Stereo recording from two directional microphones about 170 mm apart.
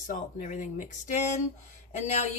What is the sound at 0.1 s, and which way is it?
A woman's voice, 45° left (ahead or behind).